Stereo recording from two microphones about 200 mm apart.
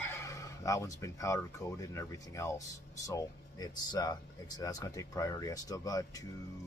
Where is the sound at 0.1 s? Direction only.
15° left (ahead or behind).